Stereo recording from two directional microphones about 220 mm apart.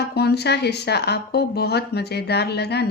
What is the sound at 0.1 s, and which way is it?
Speech, 45° left (ahead or behind).